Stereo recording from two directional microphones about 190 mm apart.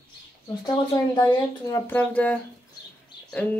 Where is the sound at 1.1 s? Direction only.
20° left (ahead or behind).